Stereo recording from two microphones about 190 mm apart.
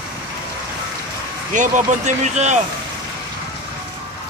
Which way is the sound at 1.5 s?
40° right (ahead or behind).